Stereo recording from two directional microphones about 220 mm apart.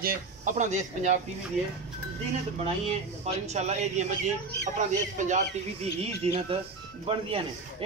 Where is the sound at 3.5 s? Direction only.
30° right (ahead or behind).